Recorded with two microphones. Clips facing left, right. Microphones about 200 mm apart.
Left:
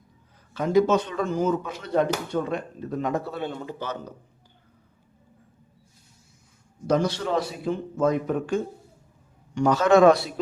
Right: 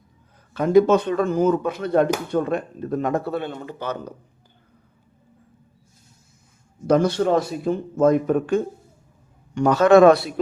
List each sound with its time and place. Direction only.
0.5 s a man's voice: 55° right (ahead or behind)
6.8 s a man's voice: 55° right (ahead or behind)